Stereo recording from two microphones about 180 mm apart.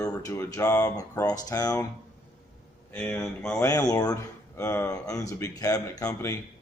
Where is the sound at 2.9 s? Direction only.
10° left (ahead or behind).